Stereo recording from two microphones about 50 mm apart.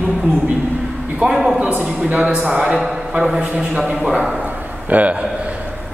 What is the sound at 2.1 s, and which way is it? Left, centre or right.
A man's voice, right.